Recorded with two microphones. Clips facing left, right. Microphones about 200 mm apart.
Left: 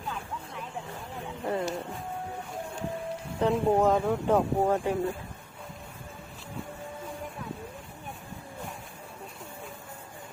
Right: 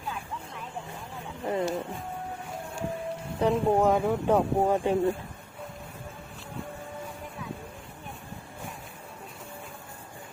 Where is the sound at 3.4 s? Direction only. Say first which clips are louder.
Right 1 dB; 15° right (ahead or behind).